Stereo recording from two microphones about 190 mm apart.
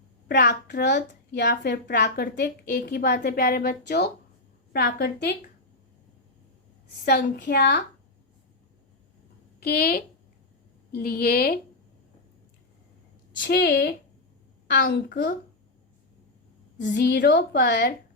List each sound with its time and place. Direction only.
0.3 s a child's voice: 60° left (ahead or behind)
7.0 s a child's voice: 60° left (ahead or behind)
9.6 s a woman's voice: 55° left (ahead or behind)
13.4 s a child's voice: 65° left (ahead or behind)
16.7 s a child's voice: 65° left (ahead or behind)